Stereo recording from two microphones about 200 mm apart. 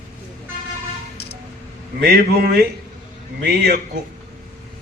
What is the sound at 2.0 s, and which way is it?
A man's voice, 50° right (ahead or behind).